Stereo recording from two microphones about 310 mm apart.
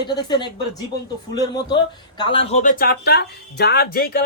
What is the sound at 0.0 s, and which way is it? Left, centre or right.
A man's voice, centre.